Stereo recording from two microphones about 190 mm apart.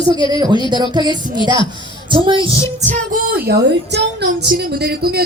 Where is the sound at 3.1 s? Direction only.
55° right (ahead or behind).